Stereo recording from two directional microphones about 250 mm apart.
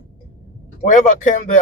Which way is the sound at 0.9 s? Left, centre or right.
Left.